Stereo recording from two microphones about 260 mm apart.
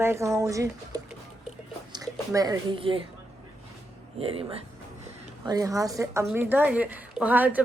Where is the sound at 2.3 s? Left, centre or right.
Centre.